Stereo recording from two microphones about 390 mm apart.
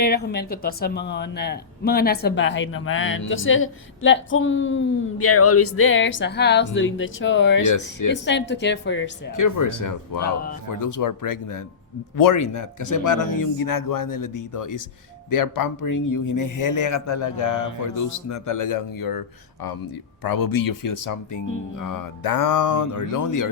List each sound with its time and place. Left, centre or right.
0.0 s speech: left
7.6 s a man's voice: left
8.1 s speech: left
9.3 s a man's voice: left
20.2 s a man's voice: left